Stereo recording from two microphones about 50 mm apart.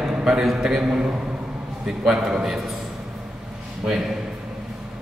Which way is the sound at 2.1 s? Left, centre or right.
Centre.